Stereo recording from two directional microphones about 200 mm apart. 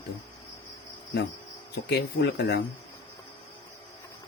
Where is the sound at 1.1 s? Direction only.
55° left (ahead or behind).